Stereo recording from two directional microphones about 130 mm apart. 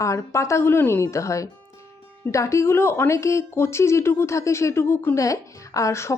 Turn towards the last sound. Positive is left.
turn(degrees=20)  # may be behind; listen again after turning